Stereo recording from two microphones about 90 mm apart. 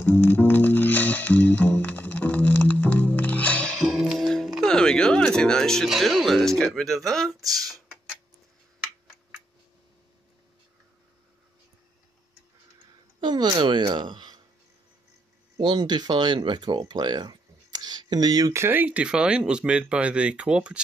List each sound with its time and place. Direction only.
0.0 s music: 25° left (ahead or behind)
3.7 s music: centre (ahead or behind)
5.9 s speech: centre (ahead or behind)
7.3 s a sound: 40° right (ahead or behind)
13.2 s a sound: 55° right (ahead or behind)
15.6 s speech: 55° right (ahead or behind)
18.5 s speech: 25° right (ahead or behind)